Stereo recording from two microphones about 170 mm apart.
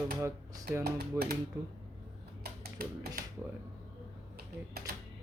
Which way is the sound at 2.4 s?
65° right (ahead or behind).